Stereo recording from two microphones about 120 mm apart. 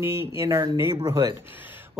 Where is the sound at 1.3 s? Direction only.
15° right (ahead or behind).